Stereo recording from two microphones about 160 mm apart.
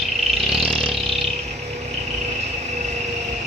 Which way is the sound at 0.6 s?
35° right (ahead or behind).